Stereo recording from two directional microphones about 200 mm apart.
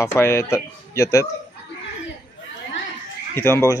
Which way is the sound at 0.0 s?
15° left (ahead or behind).